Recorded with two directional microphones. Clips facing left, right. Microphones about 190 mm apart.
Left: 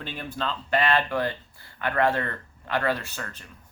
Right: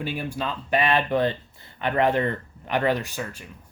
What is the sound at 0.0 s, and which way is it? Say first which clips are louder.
Speech: right 3 dB; 10° right (ahead or behind).